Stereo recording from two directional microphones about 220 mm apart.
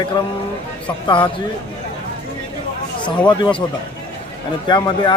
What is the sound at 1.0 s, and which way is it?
Speech, 20° left (ahead or behind).